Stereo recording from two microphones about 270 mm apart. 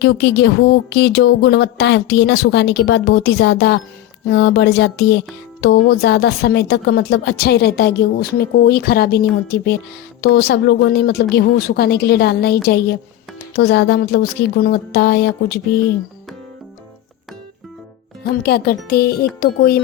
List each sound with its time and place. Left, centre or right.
0.0 s speech: left
18.4 s speech: left